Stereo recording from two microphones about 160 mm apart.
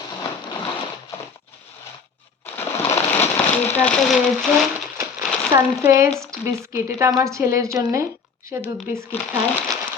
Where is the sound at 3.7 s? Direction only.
5° left (ahead or behind).